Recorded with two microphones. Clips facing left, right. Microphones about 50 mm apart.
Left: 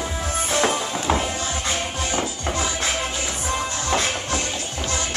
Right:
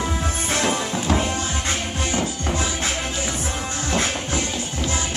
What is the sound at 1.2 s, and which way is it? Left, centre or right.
Music, right.